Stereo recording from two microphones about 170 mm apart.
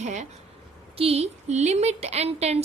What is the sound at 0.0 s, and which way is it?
A woman's voice, 45° right (ahead or behind).